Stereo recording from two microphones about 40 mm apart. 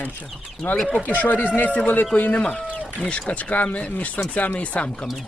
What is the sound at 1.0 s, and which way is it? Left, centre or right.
Speech, left.